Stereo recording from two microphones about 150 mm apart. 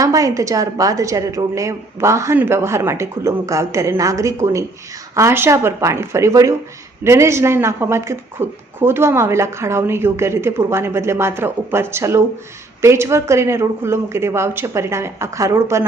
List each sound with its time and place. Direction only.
0.0 s a woman's voice: 20° right (ahead or behind)